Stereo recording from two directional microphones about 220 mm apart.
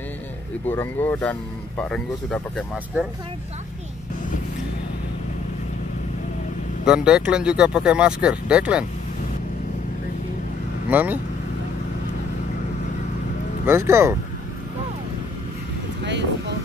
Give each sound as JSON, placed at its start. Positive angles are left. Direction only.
{"t": 0.7, "sound": "speech", "side_deg": 10}
{"t": 6.8, "sound": "speech", "side_deg": -5}
{"t": 10.9, "sound": "speech", "side_deg": -10}
{"t": 13.7, "sound": "speech", "side_deg": -10}
{"t": 16.0, "sound": "speech", "side_deg": -55}